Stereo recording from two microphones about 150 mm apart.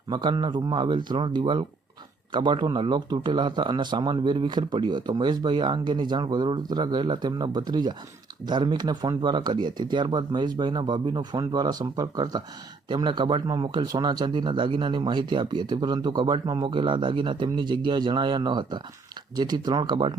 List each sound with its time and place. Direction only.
0.1 s speech: 30° right (ahead or behind)